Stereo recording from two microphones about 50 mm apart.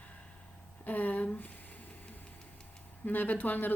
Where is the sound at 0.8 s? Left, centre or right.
Left.